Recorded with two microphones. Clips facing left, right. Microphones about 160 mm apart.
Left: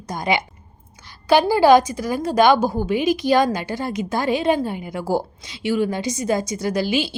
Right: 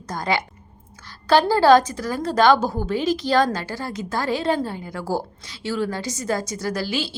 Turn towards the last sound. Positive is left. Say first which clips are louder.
# left 4 dB
turn(degrees=15)  # may be behind; listen again after turning